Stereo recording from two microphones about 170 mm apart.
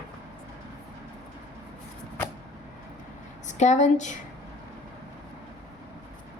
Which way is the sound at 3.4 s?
45° left (ahead or behind).